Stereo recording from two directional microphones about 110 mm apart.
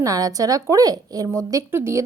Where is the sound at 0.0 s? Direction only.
35° right (ahead or behind).